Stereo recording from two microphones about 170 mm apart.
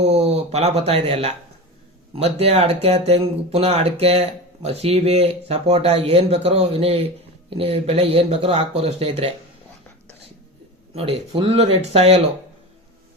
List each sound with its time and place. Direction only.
0.0 s speech: 40° right (ahead or behind)
10.9 s speech: 35° right (ahead or behind)